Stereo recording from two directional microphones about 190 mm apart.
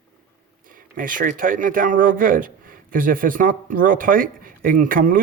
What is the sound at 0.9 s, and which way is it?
A man's voice, 45° right (ahead or behind).